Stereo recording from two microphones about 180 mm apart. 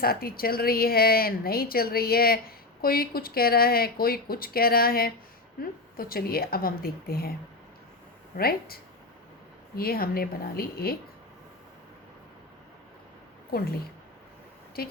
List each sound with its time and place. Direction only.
0.0 s a woman's voice: 55° left (ahead or behind)
8.4 s a woman's voice: 55° left (ahead or behind)
14.8 s a woman's voice: 60° left (ahead or behind)